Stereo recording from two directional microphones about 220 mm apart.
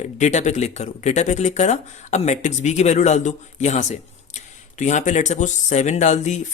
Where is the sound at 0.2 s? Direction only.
30° left (ahead or behind).